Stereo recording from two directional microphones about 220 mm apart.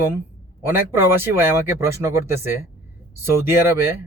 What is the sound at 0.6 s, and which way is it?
Speech, 10° right (ahead or behind).